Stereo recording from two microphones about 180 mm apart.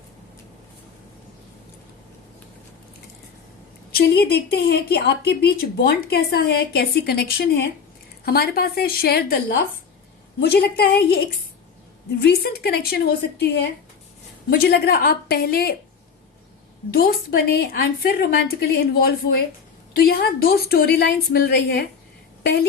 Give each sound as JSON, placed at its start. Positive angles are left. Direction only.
{"t": 3.9, "sound": "speech", "side_deg": 60}
{"t": 12.2, "sound": "speech", "side_deg": 60}
{"t": 16.9, "sound": "speech", "side_deg": 55}